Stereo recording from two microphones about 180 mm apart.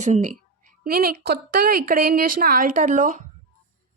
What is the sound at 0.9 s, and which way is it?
A woman's voice, 55° right (ahead or behind).